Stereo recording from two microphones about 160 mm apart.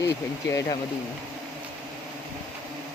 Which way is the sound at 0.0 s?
20° left (ahead or behind).